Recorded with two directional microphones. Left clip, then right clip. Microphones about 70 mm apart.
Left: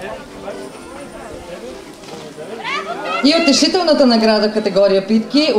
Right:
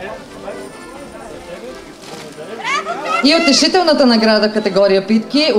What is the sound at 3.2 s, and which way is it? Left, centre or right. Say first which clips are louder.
A man's voice: right 1 dB; right.